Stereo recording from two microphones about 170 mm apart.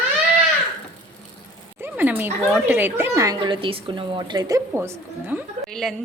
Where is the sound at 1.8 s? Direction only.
10° right (ahead or behind).